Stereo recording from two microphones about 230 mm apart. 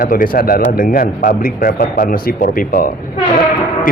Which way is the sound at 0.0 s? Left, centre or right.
Left.